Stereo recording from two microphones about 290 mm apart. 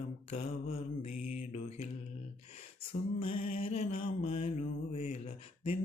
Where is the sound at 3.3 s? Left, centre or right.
Left.